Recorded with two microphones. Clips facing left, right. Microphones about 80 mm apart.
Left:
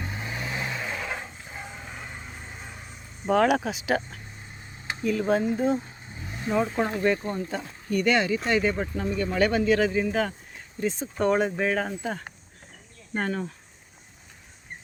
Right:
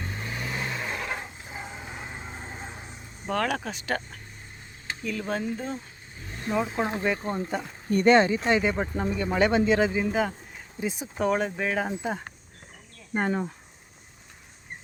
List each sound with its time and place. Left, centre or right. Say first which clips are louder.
0.0 s vehicle: left 1 dB; centre; by 2.9 s right
3.2 s speech: left 6 dB; centre
5.2 s speech: left 7 dB; centre
6.2 s vehicle: left 2 dB; centre
6.5 s speech: left 2 dB; centre
7.2 s speech: right 1 dB; right
8.4 s speech: even; centre